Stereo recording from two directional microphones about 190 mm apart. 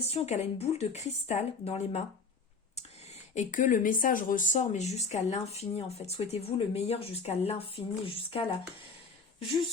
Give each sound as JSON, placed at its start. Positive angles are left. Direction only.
{"t": 0.0, "sound": "speech", "side_deg": 35}
{"t": 3.1, "sound": "speech", "side_deg": 40}